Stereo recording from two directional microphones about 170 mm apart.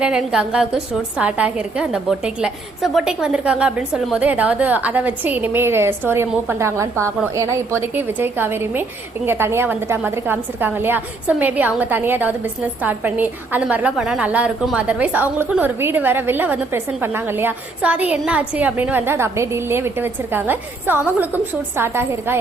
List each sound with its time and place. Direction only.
0.0 s a woman's voice: 5° right (ahead or behind)